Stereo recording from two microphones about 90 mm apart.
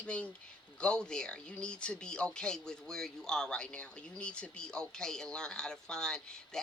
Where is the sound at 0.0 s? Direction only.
15° left (ahead or behind).